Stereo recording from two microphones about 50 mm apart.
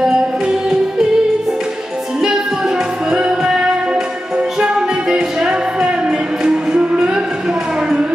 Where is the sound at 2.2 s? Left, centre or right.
Centre.